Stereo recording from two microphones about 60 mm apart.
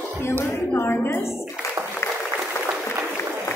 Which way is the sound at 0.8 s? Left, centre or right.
Left.